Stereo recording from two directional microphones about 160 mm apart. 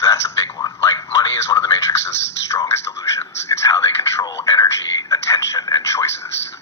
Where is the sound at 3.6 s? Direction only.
20° left (ahead or behind).